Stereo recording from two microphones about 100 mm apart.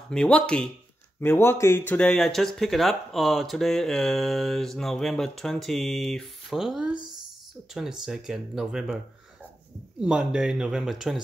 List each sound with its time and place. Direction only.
0.1 s speech: 10° left (ahead or behind)
1.2 s speech: 25° left (ahead or behind)
2.0 s speech: 10° left (ahead or behind)